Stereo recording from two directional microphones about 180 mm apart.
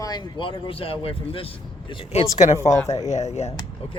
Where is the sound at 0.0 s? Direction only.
25° left (ahead or behind).